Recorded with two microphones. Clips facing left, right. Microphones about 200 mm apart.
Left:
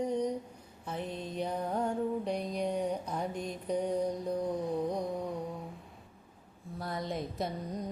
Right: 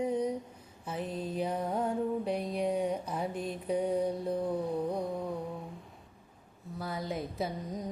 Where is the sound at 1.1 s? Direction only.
35° right (ahead or behind).